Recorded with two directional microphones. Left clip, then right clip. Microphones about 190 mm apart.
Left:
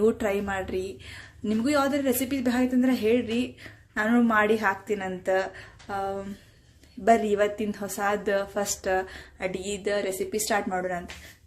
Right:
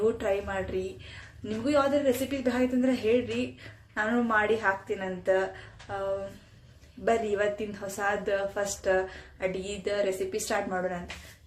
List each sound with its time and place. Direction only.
0.2 s a woman's voice: 40° left (ahead or behind)